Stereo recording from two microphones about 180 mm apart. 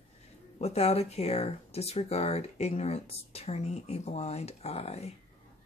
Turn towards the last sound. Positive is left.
turn(degrees=35)  # may be behind; listen again after turning